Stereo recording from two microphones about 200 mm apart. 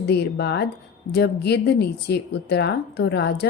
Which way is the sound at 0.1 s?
55° left (ahead or behind).